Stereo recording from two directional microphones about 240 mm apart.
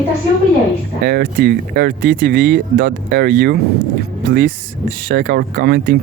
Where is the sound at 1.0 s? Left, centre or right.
Right.